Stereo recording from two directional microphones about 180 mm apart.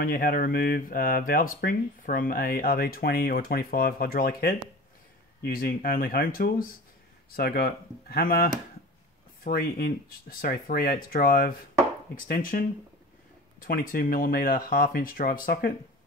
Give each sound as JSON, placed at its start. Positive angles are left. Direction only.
{"t": 0.0, "sound": "speech", "side_deg": 50}